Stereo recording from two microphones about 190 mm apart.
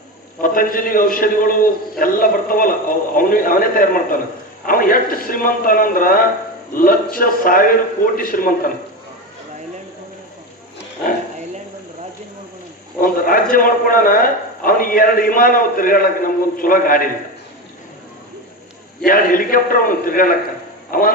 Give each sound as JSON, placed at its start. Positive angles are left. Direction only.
{"t": 0.4, "sound": "a man's voice", "side_deg": 45}
{"t": 13.0, "sound": "a man's voice", "side_deg": 50}
{"t": 19.0, "sound": "a man's voice", "side_deg": 45}